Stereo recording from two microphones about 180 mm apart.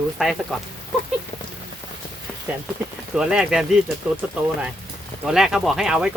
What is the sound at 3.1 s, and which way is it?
Speech, 5° right (ahead or behind).